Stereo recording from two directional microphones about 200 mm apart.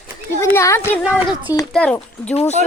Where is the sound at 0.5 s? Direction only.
15° left (ahead or behind).